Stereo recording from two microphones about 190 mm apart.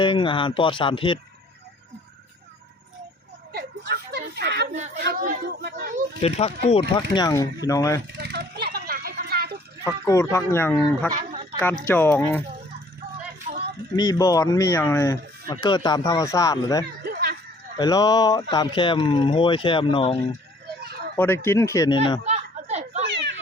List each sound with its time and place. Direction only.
0.0 s speech: 25° left (ahead or behind)
3.5 s a sound: 55° right (ahead or behind)
4.9 s speech: 55° right (ahead or behind)
6.2 s speech: 35° left (ahead or behind); by 8.0 s 15° left (ahead or behind)
8.2 s vehicle: 60° right (ahead or behind)
9.8 s speech: 15° left (ahead or behind)
11.1 s speech: 45° right (ahead or behind)
11.6 s speech: 10° left (ahead or behind)
13.9 s speech: 20° left (ahead or behind)
17.0 s a sound: 60° right (ahead or behind)
17.7 s speech: 20° left (ahead or behind)
21.2 s speech: 10° left (ahead or behind)
22.2 s a sound: 35° right (ahead or behind)